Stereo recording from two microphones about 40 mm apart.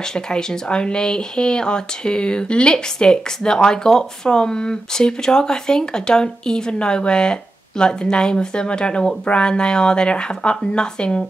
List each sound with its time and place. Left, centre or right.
0.1 s speech: centre